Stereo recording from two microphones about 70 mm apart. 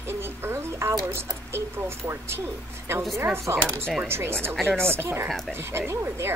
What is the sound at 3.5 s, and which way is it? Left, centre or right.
Speech, right.